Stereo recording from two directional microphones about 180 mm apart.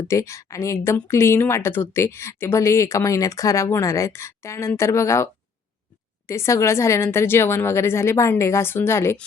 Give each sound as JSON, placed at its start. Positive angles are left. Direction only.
{"t": 0.1, "sound": "a woman's voice", "side_deg": 15}